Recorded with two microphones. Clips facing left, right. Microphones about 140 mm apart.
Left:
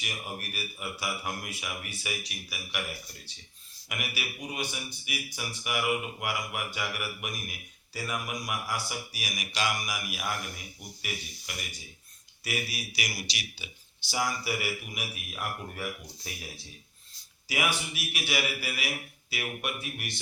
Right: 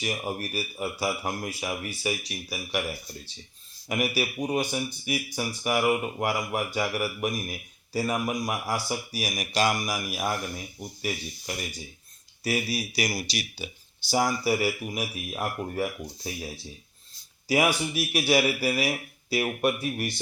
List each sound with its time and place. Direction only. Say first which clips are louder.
0.0 s a man's voice: right 8 dB; 40° right (ahead or behind)
3.8 s a man's voice: right 10 dB; 35° right (ahead or behind)
17.5 s a man's voice: right 8 dB; 40° right (ahead or behind)